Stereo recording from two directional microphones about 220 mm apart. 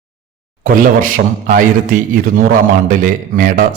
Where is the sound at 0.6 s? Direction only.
40° right (ahead or behind).